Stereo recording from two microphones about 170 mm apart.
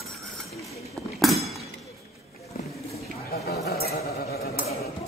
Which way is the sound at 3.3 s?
65° left (ahead or behind).